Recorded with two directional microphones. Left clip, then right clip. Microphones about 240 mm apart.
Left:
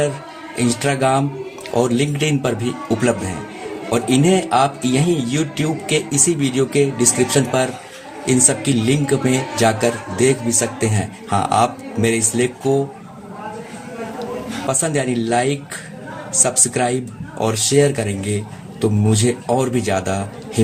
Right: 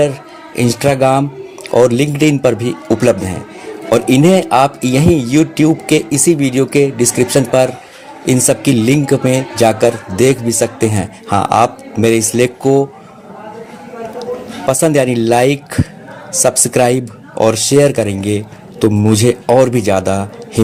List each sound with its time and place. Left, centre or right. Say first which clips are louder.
0.5 s speech: right 6 dB; right
14.7 s speech: right 9 dB; right